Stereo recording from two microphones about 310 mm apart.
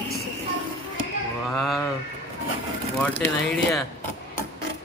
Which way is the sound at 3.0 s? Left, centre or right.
Centre.